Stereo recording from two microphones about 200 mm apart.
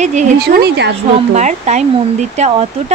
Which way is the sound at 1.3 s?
35° right (ahead or behind).